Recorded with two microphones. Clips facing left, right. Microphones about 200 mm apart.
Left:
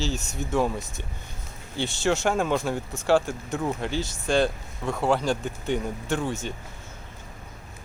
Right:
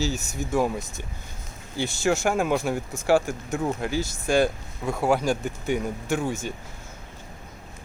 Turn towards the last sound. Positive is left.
turn(degrees=-10)  # may be behind; listen again after turning